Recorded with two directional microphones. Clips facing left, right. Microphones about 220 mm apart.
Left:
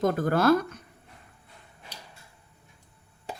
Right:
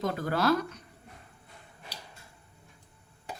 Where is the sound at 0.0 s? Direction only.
50° left (ahead or behind).